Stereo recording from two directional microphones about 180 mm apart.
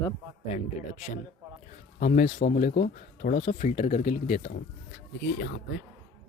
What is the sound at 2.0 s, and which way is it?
Speech, 45° left (ahead or behind).